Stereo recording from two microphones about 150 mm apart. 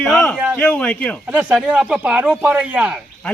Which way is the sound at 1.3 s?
10° right (ahead or behind).